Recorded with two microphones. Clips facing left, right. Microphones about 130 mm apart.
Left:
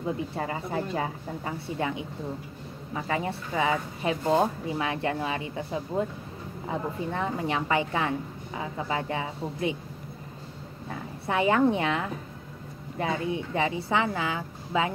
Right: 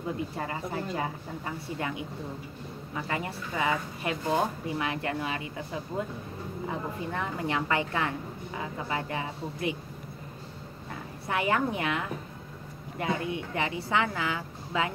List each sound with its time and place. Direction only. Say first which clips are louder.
0.4 s speech: left 3 dB; 25° left (ahead or behind)
3.1 s speech: left 5 dB; 25° left (ahead or behind)
11.2 s speech: left 5 dB; 25° left (ahead or behind)